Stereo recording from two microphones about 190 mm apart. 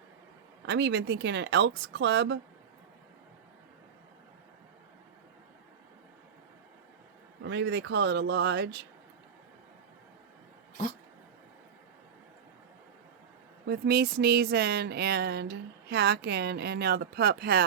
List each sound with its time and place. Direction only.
0.6 s speech: 70° right (ahead or behind)
7.4 s speech: 70° right (ahead or behind)
13.7 s a sound: 60° right (ahead or behind)